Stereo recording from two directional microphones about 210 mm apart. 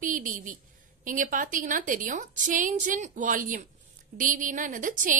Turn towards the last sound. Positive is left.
turn(degrees=-40)  # may be behind; listen again after turning